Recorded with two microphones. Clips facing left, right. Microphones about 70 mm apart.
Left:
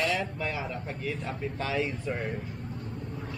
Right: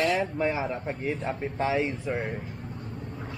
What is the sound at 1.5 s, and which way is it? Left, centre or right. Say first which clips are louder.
Speech: right 4 dB; centre.